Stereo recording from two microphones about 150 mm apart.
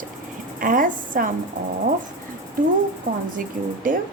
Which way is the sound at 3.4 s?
65° right (ahead or behind).